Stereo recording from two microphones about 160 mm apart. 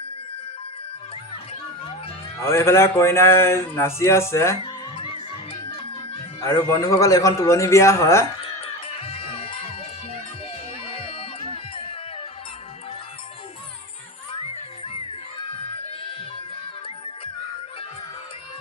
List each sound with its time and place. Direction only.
2.5 s a man's voice: 15° left (ahead or behind)
4.6 s music: 35° left (ahead or behind)
6.4 s a man's voice: 20° left (ahead or behind)
8.4 s music: 35° left (ahead or behind)
11.1 s music: 35° left (ahead or behind)